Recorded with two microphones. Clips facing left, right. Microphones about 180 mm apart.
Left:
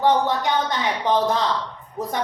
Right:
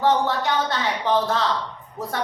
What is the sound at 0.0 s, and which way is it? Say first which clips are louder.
A woman's voice: left 1 dB; 15° left (ahead or behind).